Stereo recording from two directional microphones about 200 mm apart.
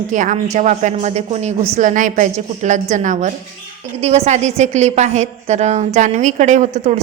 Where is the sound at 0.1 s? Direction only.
40° right (ahead or behind).